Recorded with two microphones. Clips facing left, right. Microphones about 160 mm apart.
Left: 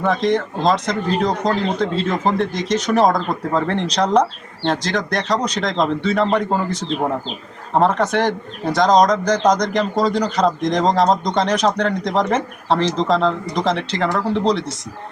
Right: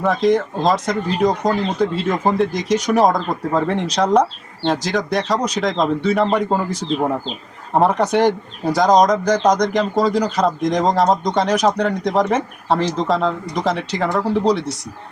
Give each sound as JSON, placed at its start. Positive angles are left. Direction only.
{"t": 0.0, "sound": "speech", "side_deg": -5}